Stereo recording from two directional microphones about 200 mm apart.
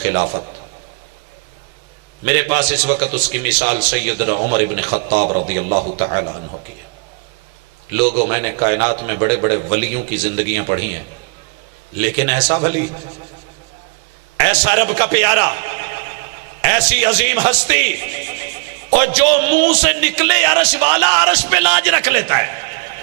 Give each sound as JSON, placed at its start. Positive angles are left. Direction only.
{"t": 0.0, "sound": "a man's voice", "side_deg": -15}
{"t": 2.2, "sound": "a man's voice", "side_deg": -15}
{"t": 4.9, "sound": "a man's voice", "side_deg": -40}
{"t": 6.1, "sound": "a man's voice", "side_deg": -25}
{"t": 8.0, "sound": "a man's voice", "side_deg": -40}
{"t": 8.3, "sound": "a man's voice", "side_deg": -15}
{"t": 14.3, "sound": "a man's voice", "side_deg": -10}